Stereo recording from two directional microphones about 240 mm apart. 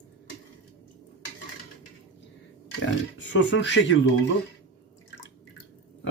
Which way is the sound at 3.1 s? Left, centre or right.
Left.